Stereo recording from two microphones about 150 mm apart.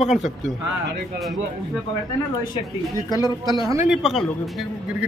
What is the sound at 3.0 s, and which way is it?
Speech, 25° left (ahead or behind).